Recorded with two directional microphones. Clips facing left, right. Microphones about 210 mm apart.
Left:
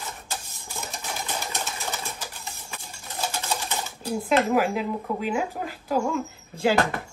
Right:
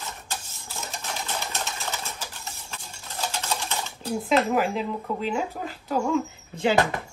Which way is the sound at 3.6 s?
15° left (ahead or behind).